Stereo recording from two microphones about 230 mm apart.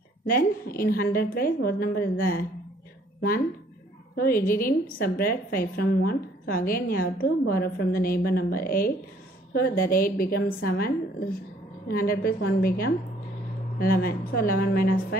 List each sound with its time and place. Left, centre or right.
0.3 s a woman's voice: left
4.2 s a woman's voice: left